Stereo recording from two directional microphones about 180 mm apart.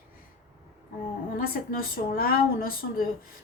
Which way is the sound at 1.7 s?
50° left (ahead or behind).